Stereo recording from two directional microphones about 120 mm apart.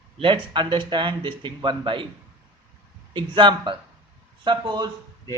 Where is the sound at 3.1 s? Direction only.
40° right (ahead or behind).